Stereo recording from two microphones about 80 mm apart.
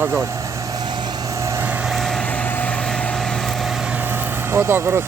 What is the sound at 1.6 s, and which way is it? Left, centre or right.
Vehicle, centre.